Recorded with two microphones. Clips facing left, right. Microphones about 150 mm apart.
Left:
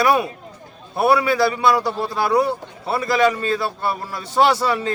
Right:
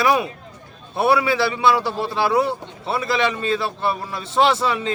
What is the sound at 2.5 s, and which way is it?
A man's voice, 25° right (ahead or behind).